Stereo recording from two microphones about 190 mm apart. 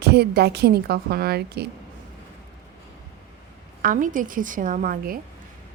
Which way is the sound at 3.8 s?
45° right (ahead or behind).